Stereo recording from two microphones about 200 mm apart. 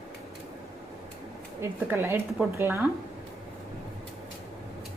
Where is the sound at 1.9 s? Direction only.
10° right (ahead or behind).